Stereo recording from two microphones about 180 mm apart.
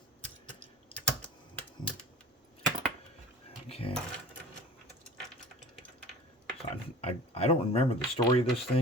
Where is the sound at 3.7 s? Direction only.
30° left (ahead or behind).